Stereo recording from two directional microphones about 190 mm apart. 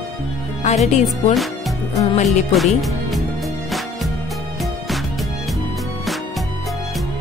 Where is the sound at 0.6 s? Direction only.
35° left (ahead or behind).